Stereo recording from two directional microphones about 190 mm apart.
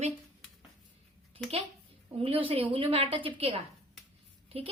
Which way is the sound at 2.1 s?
30° right (ahead or behind).